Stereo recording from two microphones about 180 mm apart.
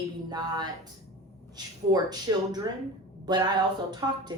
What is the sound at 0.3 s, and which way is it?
A woman's voice, 20° right (ahead or behind).